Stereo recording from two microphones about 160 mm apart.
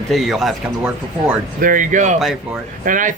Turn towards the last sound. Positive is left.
turn(degrees=-55)  # may be behind; listen again after turning